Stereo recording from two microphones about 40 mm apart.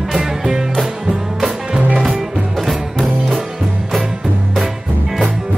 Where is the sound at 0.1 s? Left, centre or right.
Centre.